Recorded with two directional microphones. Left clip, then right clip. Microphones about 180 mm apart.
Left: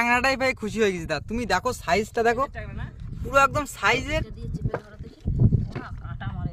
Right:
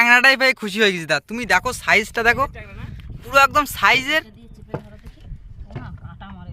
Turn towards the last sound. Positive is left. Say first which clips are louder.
# left 2 dB
turn(degrees=35)  # may be behind; listen again after turning